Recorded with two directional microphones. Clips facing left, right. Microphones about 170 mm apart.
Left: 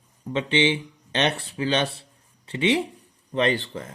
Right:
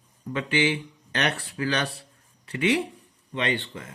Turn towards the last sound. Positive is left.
turn(degrees=40)  # may be behind; listen again after turning